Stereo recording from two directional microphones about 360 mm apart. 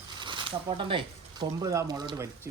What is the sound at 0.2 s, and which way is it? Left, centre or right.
Speech, centre.